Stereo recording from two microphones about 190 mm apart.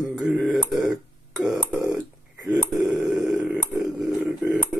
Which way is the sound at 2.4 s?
5° right (ahead or behind).